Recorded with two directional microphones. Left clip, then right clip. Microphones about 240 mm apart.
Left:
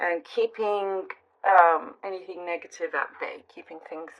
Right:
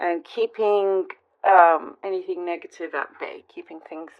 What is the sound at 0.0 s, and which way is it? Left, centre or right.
Speech, right.